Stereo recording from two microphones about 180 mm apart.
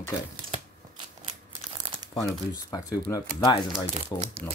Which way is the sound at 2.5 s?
20° left (ahead or behind).